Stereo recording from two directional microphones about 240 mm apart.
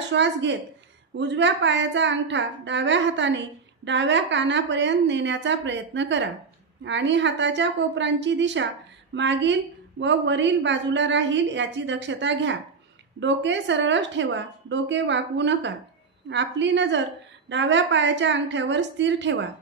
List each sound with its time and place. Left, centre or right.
0.1 s a woman's voice: right